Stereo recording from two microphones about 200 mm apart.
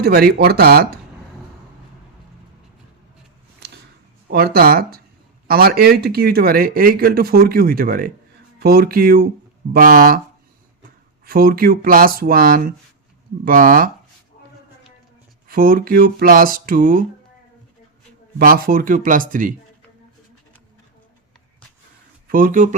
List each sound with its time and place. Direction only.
0.0 s speech: 50° right (ahead or behind)
4.3 s speech: 50° right (ahead or behind)
11.3 s speech: 45° right (ahead or behind)
15.4 s speech: 45° right (ahead or behind)
18.3 s speech: 45° right (ahead or behind)
22.3 s speech: 45° right (ahead or behind)